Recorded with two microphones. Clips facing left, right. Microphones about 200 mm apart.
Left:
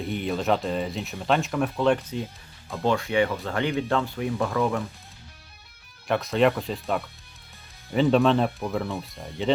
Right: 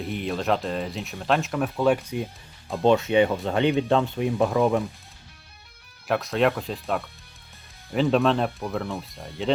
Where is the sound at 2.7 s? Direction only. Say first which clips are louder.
Right 5 dB; 20° right (ahead or behind).